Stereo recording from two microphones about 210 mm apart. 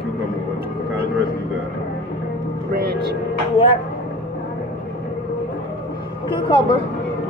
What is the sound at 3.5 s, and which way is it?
Speech, 25° left (ahead or behind).